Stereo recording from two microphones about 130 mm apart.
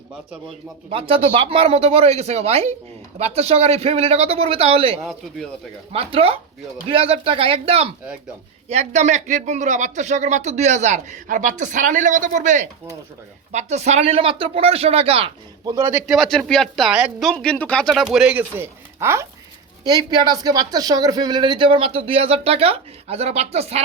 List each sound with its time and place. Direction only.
0.9 s speech: 45° right (ahead or behind)
8.7 s speech: 60° right (ahead or behind)
13.5 s speech: 60° right (ahead or behind)
15.6 s speech: 30° right (ahead or behind)
16.0 s speech: 5° right (ahead or behind)
17.3 s speech: 10° left (ahead or behind)
18.0 s speech: 5° right (ahead or behind)
19.8 s speech: 30° right (ahead or behind); by 23.8 s 55° right (ahead or behind)